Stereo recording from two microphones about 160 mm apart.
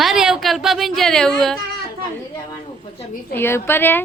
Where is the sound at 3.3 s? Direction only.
15° left (ahead or behind).